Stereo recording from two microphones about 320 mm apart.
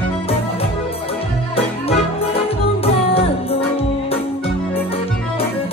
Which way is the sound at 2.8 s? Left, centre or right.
Centre.